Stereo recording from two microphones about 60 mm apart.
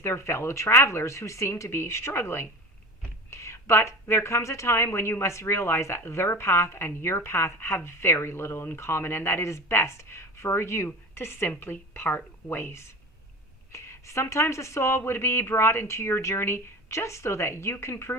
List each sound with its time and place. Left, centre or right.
0.0 s speech: left
13.7 s speech: left